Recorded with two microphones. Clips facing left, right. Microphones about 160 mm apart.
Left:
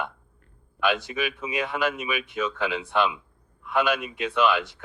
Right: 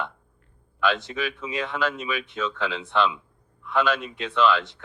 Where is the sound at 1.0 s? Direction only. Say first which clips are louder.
Left 1 dB; 15° left (ahead or behind).